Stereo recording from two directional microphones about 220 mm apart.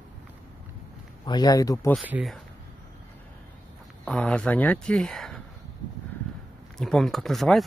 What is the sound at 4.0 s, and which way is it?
Speech, 5° left (ahead or behind).